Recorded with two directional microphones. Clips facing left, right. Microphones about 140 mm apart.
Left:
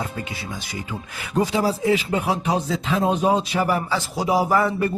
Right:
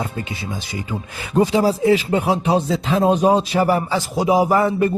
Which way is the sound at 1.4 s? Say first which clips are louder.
Right 5 dB; 30° right (ahead or behind).